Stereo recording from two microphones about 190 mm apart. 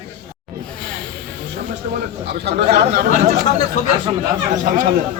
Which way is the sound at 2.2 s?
60° right (ahead or behind).